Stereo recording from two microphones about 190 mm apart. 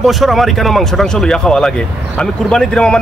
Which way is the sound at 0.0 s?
Centre (ahead or behind).